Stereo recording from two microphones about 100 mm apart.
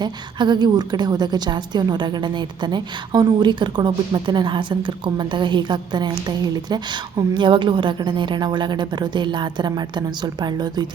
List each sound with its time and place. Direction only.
0.0 s a woman's voice: 45° right (ahead or behind)